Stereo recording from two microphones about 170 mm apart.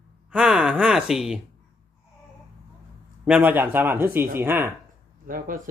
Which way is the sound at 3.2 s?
10° right (ahead or behind).